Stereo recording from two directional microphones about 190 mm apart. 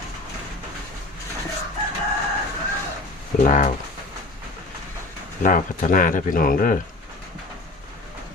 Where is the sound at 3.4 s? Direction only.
45° left (ahead or behind).